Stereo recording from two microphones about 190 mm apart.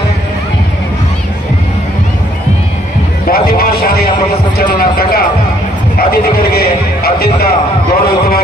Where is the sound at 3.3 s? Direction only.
55° left (ahead or behind).